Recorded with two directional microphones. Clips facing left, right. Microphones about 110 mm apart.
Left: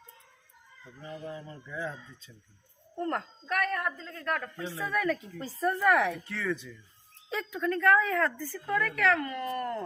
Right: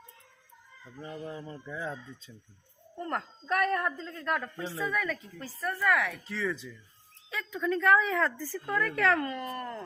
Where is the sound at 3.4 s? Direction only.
25° right (ahead or behind).